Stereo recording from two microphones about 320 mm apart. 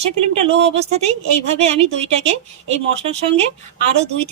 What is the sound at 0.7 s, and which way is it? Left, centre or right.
Speech, centre.